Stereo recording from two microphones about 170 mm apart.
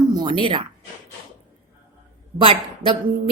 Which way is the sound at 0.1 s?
25° right (ahead or behind).